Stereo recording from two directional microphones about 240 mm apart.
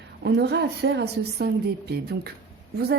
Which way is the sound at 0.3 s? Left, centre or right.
Right.